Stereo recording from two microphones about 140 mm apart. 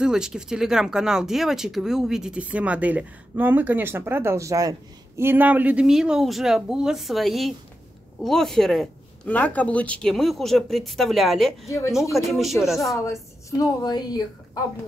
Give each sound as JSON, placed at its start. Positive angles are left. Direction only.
{"t": 0.0, "sound": "speech", "side_deg": -5}
{"t": 12.9, "sound": "a woman's voice", "side_deg": 20}